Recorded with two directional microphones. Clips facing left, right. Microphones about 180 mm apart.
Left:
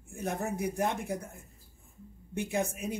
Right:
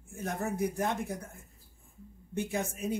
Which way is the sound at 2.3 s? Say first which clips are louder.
Left 2 dB; 15° left (ahead or behind).